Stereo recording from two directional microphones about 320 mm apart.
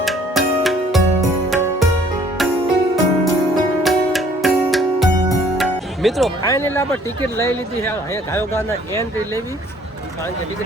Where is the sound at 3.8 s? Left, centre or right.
Centre.